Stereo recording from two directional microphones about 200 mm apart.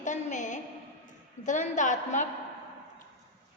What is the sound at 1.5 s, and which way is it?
Speech, 40° left (ahead or behind).